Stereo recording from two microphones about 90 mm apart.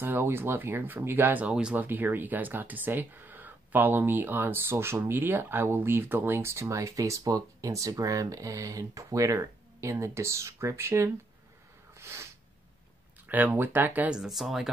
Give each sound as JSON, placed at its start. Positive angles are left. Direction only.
{"t": 0.0, "sound": "speech", "side_deg": -25}
{"t": 12.0, "sound": "sneeze", "side_deg": -30}
{"t": 13.3, "sound": "speech", "side_deg": -20}
{"t": 14.1, "sound": "speech", "side_deg": -5}